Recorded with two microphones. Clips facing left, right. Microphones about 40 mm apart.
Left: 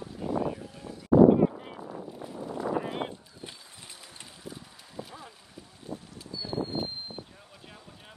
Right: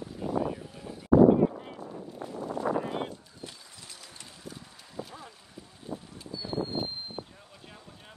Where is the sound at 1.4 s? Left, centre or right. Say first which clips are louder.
Left 1 dB; centre.